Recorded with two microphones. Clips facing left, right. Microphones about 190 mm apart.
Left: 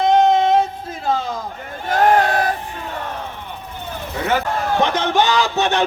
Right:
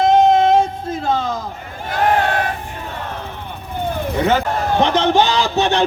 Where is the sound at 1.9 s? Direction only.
40° left (ahead or behind).